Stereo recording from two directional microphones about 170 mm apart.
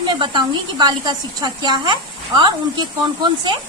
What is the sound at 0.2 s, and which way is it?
A woman's voice, 25° right (ahead or behind).